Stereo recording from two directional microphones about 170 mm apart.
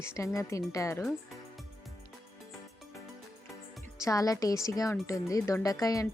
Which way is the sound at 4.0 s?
20° left (ahead or behind).